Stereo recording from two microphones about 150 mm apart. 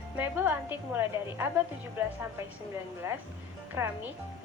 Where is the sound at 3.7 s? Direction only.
15° right (ahead or behind).